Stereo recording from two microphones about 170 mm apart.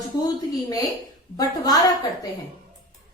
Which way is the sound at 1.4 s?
20° left (ahead or behind).